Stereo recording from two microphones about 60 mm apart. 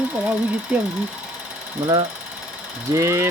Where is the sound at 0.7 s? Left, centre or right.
Right.